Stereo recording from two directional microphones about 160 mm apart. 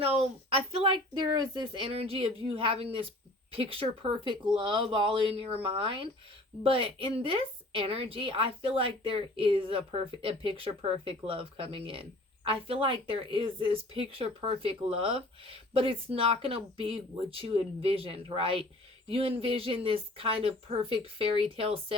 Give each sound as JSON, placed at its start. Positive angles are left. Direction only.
{"t": 0.0, "sound": "speech", "side_deg": -35}